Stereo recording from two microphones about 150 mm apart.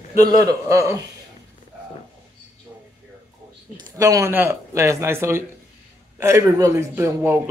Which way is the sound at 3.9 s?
20° right (ahead or behind).